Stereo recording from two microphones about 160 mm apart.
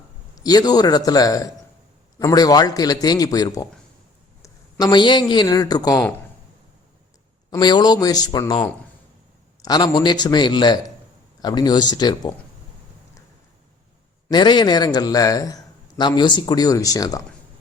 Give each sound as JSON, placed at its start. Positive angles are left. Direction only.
{"t": 0.4, "sound": "a man's voice", "side_deg": 25}
{"t": 7.5, "sound": "a man's voice", "side_deg": 25}
{"t": 14.3, "sound": "a man's voice", "side_deg": 25}